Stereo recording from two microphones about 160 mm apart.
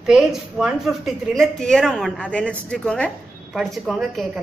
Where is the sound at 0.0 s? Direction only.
5° right (ahead or behind).